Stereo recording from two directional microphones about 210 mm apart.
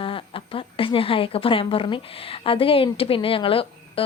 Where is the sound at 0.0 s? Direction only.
25° left (ahead or behind).